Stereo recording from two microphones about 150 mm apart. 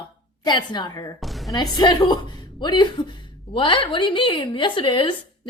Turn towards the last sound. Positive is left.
turn(degrees=35)  # may be behind; listen again after turning